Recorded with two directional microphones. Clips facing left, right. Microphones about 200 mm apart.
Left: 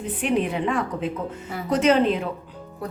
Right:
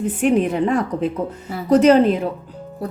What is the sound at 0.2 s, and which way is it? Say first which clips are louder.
Speech: right 6 dB; 45° right (ahead or behind).